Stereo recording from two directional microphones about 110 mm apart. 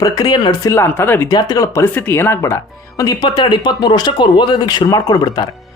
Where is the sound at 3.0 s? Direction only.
35° left (ahead or behind).